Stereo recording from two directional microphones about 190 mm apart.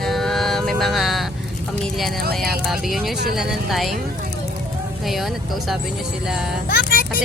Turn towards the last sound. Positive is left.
turn(degrees=55)  # may be behind; listen again after turning